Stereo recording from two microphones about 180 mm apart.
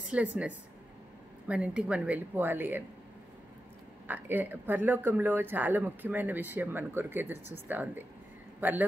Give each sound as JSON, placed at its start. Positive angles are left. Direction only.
{"t": 0.1, "sound": "speech", "side_deg": -5}
{"t": 4.1, "sound": "a man's voice", "side_deg": -10}